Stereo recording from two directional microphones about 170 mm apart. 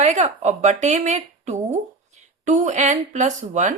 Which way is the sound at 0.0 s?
40° right (ahead or behind).